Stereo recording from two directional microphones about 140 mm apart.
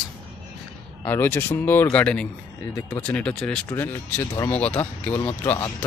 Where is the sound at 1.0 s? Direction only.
15° left (ahead or behind).